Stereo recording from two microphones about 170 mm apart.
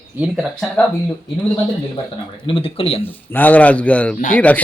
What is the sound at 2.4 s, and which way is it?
Speech, 30° left (ahead or behind).